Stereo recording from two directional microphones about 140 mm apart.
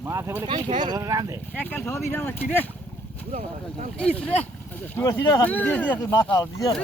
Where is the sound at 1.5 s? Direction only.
10° left (ahead or behind).